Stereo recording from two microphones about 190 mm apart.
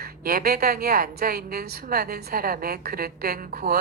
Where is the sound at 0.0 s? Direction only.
50° right (ahead or behind).